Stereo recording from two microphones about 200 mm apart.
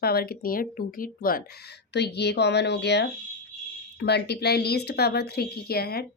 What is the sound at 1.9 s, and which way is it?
A woman's voice, 55° left (ahead or behind).